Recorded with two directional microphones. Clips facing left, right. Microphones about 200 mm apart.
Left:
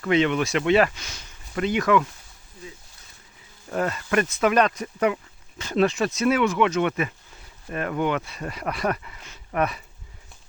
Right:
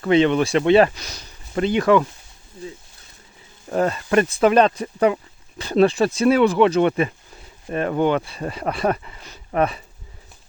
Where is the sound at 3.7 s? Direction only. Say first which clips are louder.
Right 5 dB; 30° right (ahead or behind).